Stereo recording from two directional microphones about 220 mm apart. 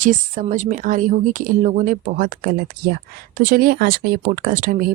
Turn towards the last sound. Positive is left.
turn(degrees=-40)  # may be behind; listen again after turning